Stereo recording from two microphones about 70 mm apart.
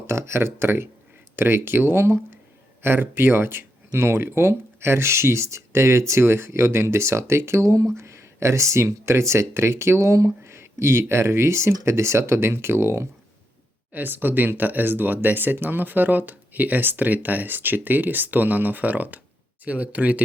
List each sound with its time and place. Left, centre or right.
0.1 s speech: right